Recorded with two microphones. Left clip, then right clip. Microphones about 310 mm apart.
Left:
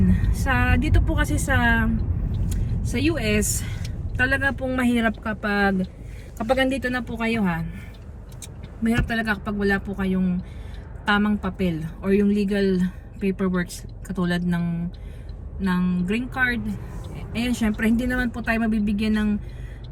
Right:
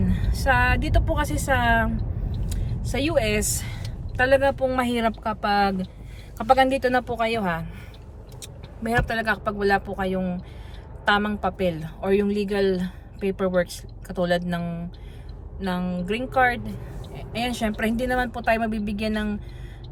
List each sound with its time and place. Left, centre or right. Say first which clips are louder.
0.1 s a woman's voice: right 3 dB; centre
6.6 s a woman's voice: right 4 dB; centre